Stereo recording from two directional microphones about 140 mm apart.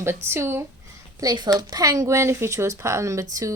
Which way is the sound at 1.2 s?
30° right (ahead or behind).